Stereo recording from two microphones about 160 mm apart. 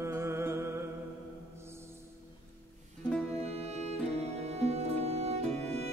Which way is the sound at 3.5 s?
40° right (ahead or behind).